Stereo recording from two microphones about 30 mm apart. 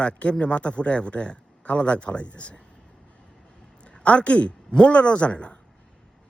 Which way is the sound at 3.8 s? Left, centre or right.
Left.